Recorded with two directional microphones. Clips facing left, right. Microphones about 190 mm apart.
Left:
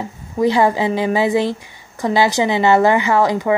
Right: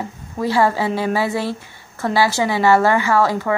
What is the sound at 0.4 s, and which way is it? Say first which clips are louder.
A woman's voice: left 3 dB; 15° left (ahead or behind).